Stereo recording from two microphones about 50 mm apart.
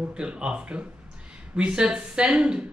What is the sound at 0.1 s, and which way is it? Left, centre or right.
A man's voice, right.